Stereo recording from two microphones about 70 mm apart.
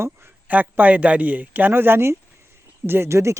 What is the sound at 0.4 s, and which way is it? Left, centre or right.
Speech, right.